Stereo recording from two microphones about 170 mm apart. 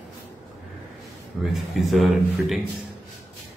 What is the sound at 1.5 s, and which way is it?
Speech, centre (ahead or behind).